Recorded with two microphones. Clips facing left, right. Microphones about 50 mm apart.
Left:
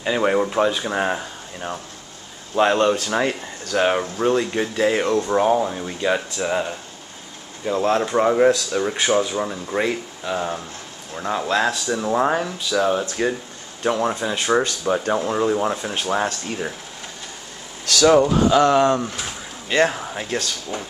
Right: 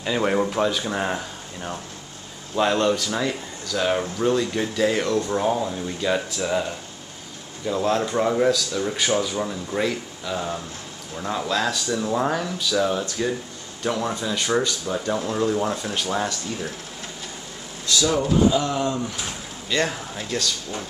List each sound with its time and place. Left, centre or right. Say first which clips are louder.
0.0 s speech: left 3 dB; centre
3.2 s speech: left 4 dB; left
4.2 s speech: left 3 dB; left
14.6 s speech: left 4 dB; left
15.1 s speech: left 3 dB; left
17.8 s speech: left 7 dB; left
19.7 s speech: left 5 dB; left